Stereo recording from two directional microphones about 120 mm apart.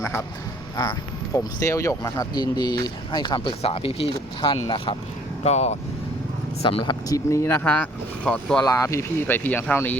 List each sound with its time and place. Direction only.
0.8 s speech: 35° left (ahead or behind)
5.4 s speech: 65° left (ahead or behind)
6.6 s speech: 50° left (ahead or behind)
6.8 s speech: 30° left (ahead or behind); by 8.6 s 5° left (ahead or behind)
8.6 s speech: 25° left (ahead or behind)